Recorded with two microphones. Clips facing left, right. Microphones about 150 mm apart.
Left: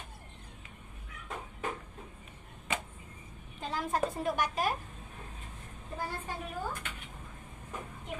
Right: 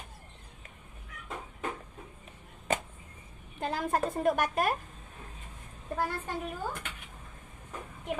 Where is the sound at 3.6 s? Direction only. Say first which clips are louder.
Right 2 dB; 60° right (ahead or behind).